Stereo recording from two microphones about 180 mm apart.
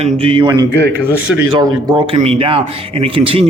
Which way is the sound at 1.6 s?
20° right (ahead or behind).